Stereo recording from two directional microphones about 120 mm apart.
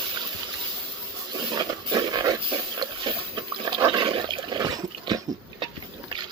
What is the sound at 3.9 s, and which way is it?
Dog, 45° right (ahead or behind).